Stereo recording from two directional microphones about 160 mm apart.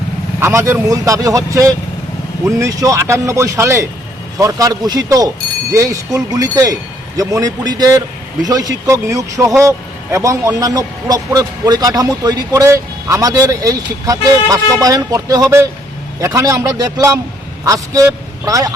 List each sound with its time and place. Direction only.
0.3 s a man's voice: 15° right (ahead or behind)